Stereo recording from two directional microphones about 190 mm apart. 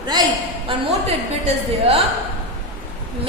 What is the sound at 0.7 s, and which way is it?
A woman's voice, 30° right (ahead or behind).